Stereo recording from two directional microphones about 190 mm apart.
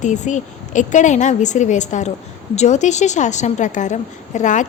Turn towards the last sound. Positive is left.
turn(degrees=40)  # may be behind; listen again after turning